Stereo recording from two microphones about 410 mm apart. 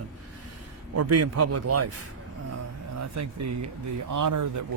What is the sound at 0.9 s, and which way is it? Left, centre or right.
Speech, right.